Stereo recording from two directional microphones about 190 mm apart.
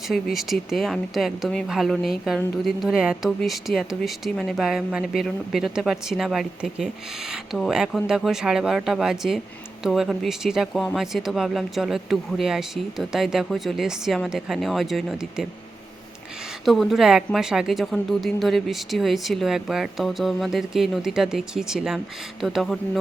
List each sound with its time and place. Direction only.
0.1 s speech: centre (ahead or behind)
16.6 s speech: centre (ahead or behind)